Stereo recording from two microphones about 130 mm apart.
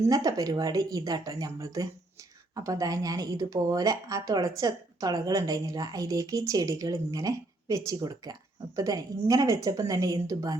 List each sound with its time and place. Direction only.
0.1 s a woman's voice: 30° right (ahead or behind)